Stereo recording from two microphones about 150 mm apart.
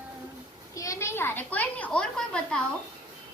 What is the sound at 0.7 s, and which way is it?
A child's voice, 20° left (ahead or behind).